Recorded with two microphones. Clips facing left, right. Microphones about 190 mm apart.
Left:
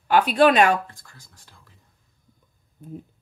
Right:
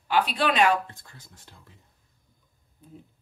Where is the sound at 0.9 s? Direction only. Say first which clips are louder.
Right 1 dB; 25° right (ahead or behind).